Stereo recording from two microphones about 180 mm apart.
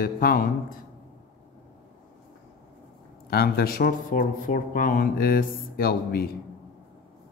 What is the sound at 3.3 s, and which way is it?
Speech, 55° left (ahead or behind).